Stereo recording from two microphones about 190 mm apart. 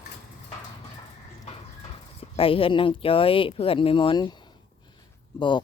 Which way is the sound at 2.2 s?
30° left (ahead or behind).